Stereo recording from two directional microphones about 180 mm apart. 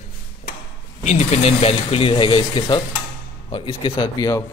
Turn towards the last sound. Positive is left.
turn(degrees=20)  # may be behind; listen again after turning